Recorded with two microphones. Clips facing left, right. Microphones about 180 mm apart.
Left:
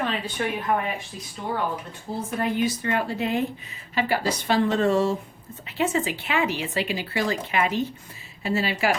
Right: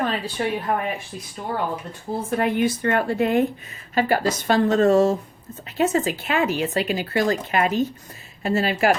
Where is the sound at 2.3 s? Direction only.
60° right (ahead or behind).